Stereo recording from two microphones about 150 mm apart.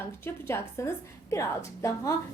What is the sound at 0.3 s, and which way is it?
A woman's voice, 15° left (ahead or behind).